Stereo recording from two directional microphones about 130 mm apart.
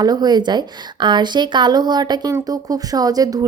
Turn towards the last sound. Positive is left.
turn(degrees=-30)  # may be behind; listen again after turning